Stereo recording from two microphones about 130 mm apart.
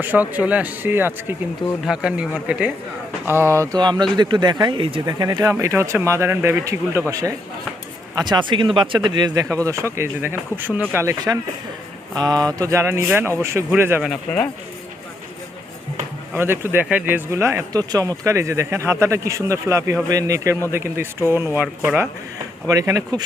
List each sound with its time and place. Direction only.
0.0 s a man's voice: 15° right (ahead or behind)
3.8 s speech: 35° right (ahead or behind)
8.2 s speech: 35° right (ahead or behind); by 11.2 s 20° right (ahead or behind)
12.1 s speech: 30° right (ahead or behind)
14.0 s speech: centre (ahead or behind)
16.3 s a man's voice: 15° right (ahead or behind)
22.6 s speech: 25° right (ahead or behind)